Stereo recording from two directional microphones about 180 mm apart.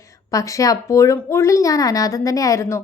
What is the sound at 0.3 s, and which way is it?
A woman's voice, 20° left (ahead or behind).